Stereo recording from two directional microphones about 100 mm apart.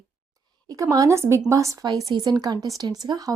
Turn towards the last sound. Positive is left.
turn(degrees=-40)  # may be behind; listen again after turning